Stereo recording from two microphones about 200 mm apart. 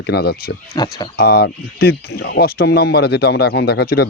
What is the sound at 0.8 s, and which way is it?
Speech, 20° left (ahead or behind).